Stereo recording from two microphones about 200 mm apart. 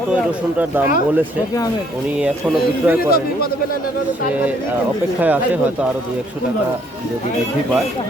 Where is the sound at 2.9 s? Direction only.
5° right (ahead or behind).